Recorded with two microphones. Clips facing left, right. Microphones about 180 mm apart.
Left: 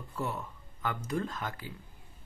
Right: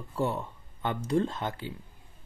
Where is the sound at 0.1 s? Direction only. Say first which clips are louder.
Right 6 dB; 30° right (ahead or behind).